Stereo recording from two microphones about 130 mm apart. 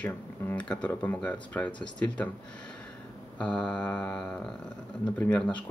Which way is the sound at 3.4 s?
10° left (ahead or behind).